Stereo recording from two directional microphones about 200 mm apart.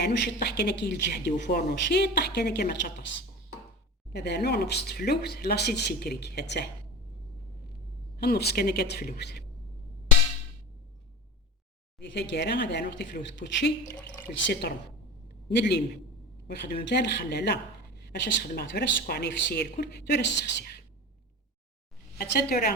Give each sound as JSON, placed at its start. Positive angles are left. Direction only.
{"t": 0.0, "sound": "speech", "side_deg": 55}
{"t": 4.1, "sound": "speech", "side_deg": 55}
{"t": 8.2, "sound": "speech", "side_deg": 50}
{"t": 11.9, "sound": "speech", "side_deg": 60}
{"t": 22.2, "sound": "speech", "side_deg": 50}